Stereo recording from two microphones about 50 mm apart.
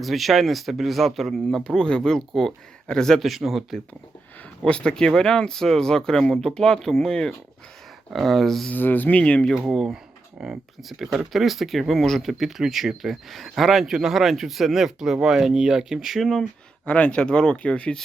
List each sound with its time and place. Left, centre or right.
0.0 s speech: centre
3.2 s speech: centre
4.6 s speech: centre
8.1 s speech: centre
8.7 s speech: left
9.1 s speech: left
10.4 s speech: centre
16.8 s speech: left